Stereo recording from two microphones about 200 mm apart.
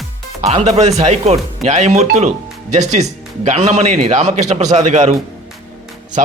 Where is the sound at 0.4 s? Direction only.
35° right (ahead or behind).